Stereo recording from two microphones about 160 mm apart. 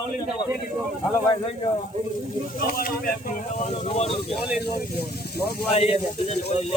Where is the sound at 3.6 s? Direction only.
40° left (ahead or behind).